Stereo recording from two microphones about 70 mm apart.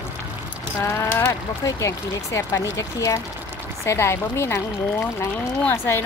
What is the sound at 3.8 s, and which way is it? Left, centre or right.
Speech, left.